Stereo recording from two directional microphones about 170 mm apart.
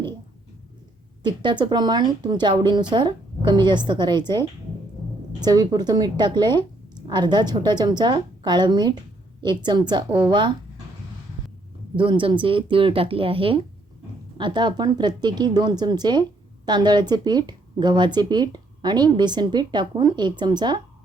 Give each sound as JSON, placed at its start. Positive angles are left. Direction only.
{"t": 1.2, "sound": "speech", "side_deg": -25}
{"t": 11.9, "sound": "speech", "side_deg": -30}